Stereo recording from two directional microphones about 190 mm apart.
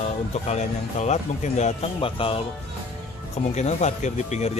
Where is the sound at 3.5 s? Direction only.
35° left (ahead or behind).